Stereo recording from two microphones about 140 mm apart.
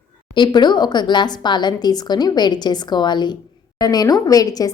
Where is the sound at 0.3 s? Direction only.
35° left (ahead or behind).